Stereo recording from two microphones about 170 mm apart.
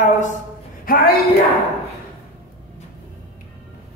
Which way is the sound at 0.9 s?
55° left (ahead or behind).